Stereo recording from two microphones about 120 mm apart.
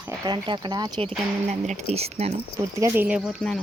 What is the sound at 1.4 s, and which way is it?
Speech, 75° right (ahead or behind).